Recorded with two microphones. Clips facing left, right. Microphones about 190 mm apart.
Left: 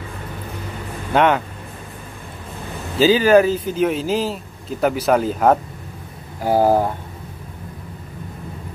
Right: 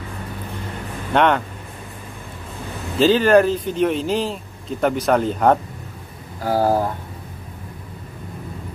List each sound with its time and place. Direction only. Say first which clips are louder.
1.1 s speech: left 1 dB; 5° left (ahead or behind)
3.0 s speech: left 1 dB; 5° left (ahead or behind)
6.4 s speech: left 3 dB; 20° left (ahead or behind)